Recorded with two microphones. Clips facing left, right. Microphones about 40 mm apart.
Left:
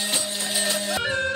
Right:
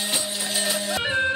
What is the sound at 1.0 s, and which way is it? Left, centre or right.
Music, right.